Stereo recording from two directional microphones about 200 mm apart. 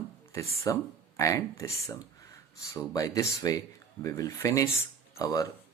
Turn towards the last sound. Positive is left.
turn(degrees=15)  # may be behind; listen again after turning